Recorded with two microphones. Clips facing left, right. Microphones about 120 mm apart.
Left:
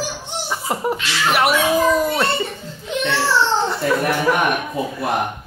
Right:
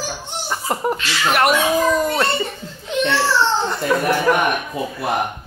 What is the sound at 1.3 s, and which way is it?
Speech, 5° left (ahead or behind).